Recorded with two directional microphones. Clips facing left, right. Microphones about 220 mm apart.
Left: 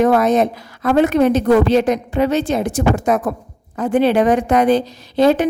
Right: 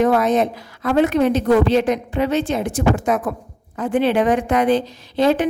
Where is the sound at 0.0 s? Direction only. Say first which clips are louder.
Left 2 dB; 45° left (ahead or behind).